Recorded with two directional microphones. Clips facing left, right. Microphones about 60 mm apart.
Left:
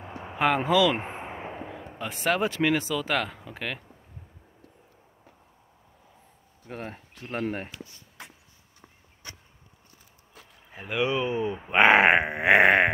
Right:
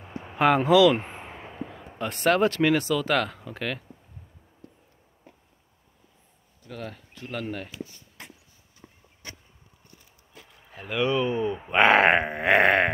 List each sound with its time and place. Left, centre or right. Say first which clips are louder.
0.1 s speech: right 3 dB; centre
0.9 s a sound: even; centre
1.7 s speech: right 2 dB; centre
6.7 s speech: even; left
10.7 s speech: right 1 dB; centre